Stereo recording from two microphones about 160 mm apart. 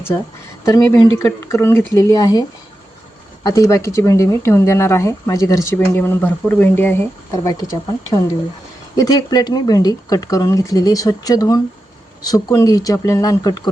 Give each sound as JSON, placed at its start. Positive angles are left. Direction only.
{"t": 0.6, "sound": "speech", "side_deg": 20}
{"t": 9.0, "sound": "speech", "side_deg": 25}